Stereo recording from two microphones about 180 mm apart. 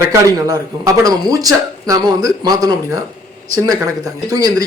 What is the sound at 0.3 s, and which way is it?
Speech, 20° right (ahead or behind).